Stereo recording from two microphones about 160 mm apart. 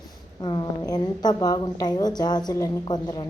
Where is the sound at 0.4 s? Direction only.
25° left (ahead or behind).